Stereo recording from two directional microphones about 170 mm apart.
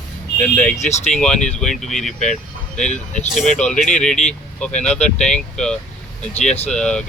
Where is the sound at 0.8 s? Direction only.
40° left (ahead or behind).